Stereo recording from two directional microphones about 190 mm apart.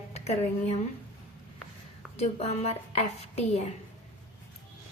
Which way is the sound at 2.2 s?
35° left (ahead or behind).